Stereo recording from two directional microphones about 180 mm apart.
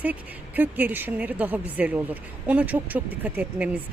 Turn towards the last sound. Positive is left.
turn(degrees=-10)  # may be behind; listen again after turning